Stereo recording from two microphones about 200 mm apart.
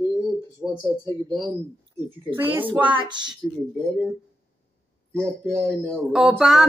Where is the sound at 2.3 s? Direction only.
10° right (ahead or behind).